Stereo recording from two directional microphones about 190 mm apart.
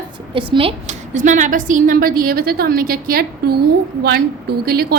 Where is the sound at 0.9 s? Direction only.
40° right (ahead or behind).